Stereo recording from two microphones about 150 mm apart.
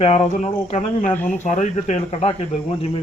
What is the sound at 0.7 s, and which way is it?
Cricket, 55° left (ahead or behind).